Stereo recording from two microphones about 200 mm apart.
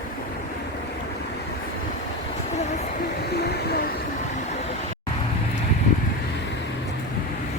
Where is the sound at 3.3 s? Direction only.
50° left (ahead or behind).